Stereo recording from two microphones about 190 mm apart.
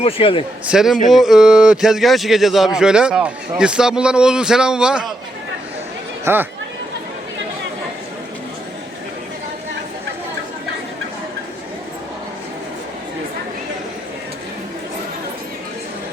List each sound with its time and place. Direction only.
0.0 s a man's voice: 30° left (ahead or behind)
0.7 s speech: centre (ahead or behind)
6.2 s speech: 10° right (ahead or behind)